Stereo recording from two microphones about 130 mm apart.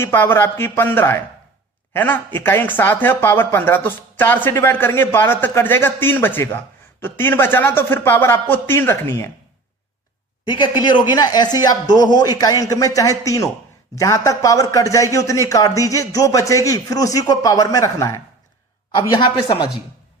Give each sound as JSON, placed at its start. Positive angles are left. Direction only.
{"t": 0.0, "sound": "speech", "side_deg": 15}
{"t": 10.4, "sound": "a man's voice", "side_deg": 35}